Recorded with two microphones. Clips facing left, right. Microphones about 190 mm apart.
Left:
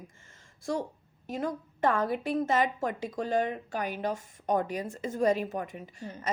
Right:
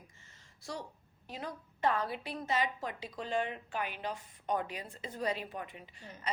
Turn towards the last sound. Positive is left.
turn(degrees=45)  # may be behind; listen again after turning